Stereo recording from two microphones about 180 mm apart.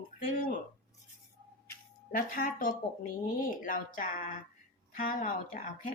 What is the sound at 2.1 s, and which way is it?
Speech, 50° left (ahead or behind).